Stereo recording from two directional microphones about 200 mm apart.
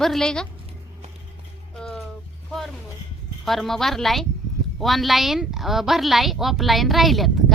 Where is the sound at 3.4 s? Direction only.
Centre (ahead or behind).